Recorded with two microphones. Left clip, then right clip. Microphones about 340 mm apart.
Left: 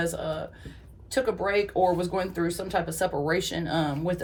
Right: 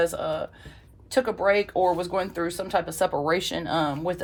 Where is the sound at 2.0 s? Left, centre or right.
Centre.